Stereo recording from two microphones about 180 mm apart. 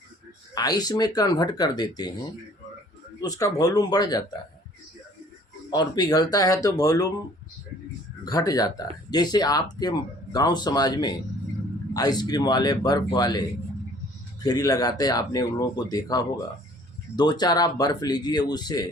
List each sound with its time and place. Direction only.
0.5 s speech: 20° left (ahead or behind)
3.2 s speech: 20° left (ahead or behind)
5.7 s speech: 25° left (ahead or behind)
8.2 s speech: 20° left (ahead or behind)
14.4 s speech: 20° left (ahead or behind)